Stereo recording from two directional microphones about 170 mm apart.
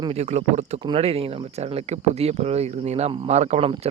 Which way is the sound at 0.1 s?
40° right (ahead or behind).